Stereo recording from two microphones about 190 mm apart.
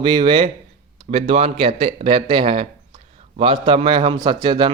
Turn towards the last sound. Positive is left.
turn(degrees=-25)  # may be behind; listen again after turning